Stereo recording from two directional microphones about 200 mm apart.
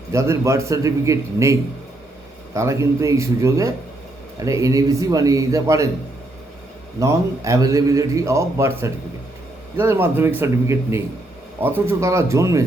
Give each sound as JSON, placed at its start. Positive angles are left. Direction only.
{"t": 0.1, "sound": "a man's voice", "side_deg": -15}
{"t": 2.6, "sound": "a man's voice", "side_deg": -15}
{"t": 7.0, "sound": "a man's voice", "side_deg": -15}